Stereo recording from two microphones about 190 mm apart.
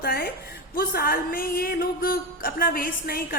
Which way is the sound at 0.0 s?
55° left (ahead or behind).